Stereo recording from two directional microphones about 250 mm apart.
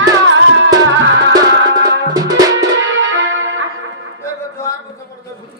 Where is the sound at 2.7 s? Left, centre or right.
Right.